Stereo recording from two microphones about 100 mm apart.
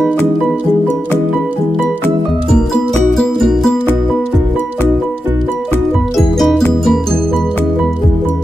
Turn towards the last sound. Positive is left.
turn(degrees=5)  # may be behind; listen again after turning